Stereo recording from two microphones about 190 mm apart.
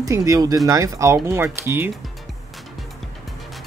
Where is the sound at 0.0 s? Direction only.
20° right (ahead or behind).